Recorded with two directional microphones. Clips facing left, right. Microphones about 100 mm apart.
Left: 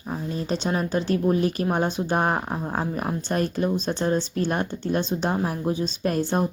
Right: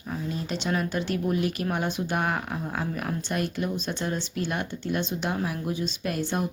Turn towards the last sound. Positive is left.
turn(degrees=35)  # may be behind; listen again after turning